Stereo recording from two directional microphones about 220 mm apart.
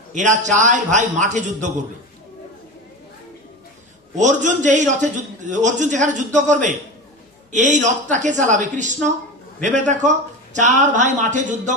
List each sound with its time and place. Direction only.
0.1 s a man's voice: 35° right (ahead or behind)
4.1 s a man's voice: 35° right (ahead or behind)